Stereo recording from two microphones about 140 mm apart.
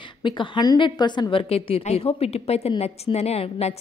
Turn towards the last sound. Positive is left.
turn(degrees=45)  # may be behind; listen again after turning